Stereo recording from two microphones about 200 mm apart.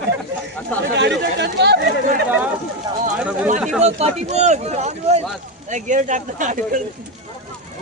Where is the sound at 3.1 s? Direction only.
5° right (ahead or behind).